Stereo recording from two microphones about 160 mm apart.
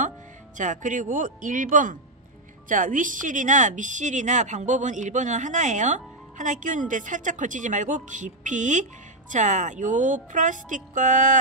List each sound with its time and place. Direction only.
0.6 s a woman's voice: 50° right (ahead or behind)